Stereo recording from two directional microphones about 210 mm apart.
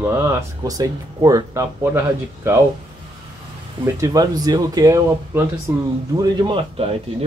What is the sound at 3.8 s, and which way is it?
A man's voice, 15° right (ahead or behind).